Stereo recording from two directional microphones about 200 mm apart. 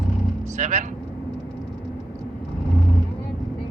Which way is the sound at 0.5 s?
40° right (ahead or behind).